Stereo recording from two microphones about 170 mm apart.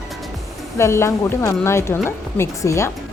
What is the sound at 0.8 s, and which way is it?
A woman's voice, 15° left (ahead or behind).